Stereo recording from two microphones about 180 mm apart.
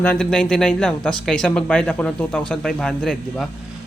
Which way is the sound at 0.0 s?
5° left (ahead or behind).